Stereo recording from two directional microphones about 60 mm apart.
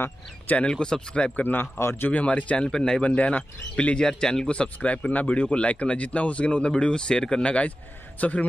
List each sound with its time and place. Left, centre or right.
0.7 s speech: centre
1.4 s speech: left
2.0 s speech: left
3.0 s speech: left